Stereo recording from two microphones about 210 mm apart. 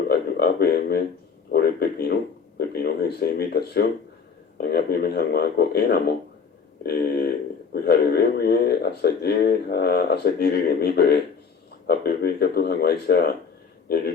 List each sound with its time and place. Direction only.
0.1 s speech: 50° left (ahead or behind)